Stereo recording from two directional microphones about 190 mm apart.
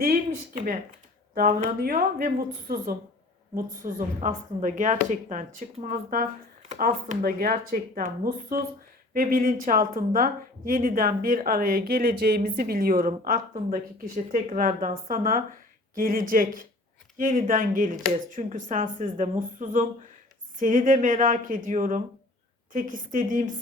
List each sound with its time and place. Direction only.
1.4 s speech: 50° right (ahead or behind)